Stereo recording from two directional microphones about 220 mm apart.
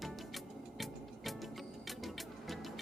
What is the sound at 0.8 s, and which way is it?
Music, centre (ahead or behind).